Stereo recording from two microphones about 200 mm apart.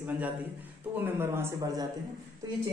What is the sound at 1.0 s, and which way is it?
Speech, 10° right (ahead or behind).